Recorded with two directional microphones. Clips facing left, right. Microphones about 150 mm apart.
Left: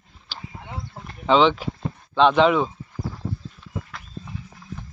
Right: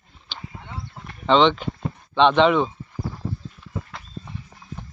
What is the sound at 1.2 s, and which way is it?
Speech, 5° left (ahead or behind).